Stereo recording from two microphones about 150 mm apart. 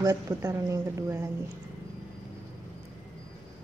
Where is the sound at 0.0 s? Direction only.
20° right (ahead or behind).